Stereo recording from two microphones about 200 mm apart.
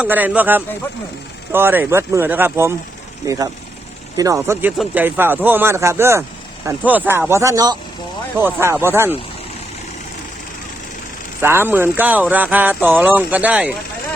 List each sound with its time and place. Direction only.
0.0 s speech: 10° right (ahead or behind)
11.3 s speech: 10° right (ahead or behind)